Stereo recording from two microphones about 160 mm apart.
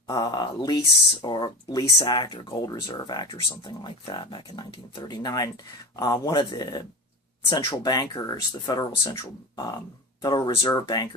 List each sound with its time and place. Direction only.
0.1 s speech: 25° left (ahead or behind)